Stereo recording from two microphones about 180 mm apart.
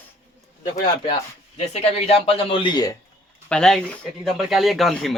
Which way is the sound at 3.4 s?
5° left (ahead or behind).